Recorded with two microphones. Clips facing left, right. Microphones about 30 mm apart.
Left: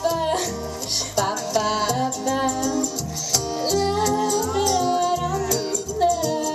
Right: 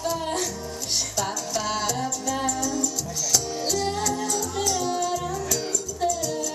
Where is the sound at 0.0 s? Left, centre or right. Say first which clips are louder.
Left 5 dB; centre.